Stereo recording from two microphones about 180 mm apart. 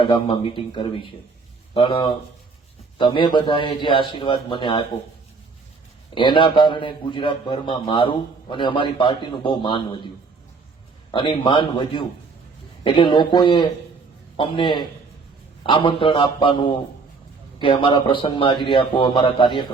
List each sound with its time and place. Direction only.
0.0 s a man's voice: 30° left (ahead or behind)
6.1 s a man's voice: 25° left (ahead or behind)
11.1 s a man's voice: 25° left (ahead or behind)